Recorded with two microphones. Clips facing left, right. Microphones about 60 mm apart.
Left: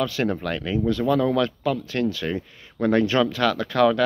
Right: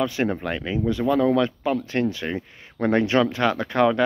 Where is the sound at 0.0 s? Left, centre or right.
Right.